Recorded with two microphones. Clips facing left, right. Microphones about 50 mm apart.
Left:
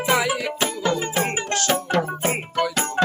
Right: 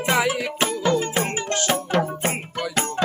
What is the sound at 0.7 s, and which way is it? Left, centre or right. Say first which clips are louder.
Music: right 2 dB; centre.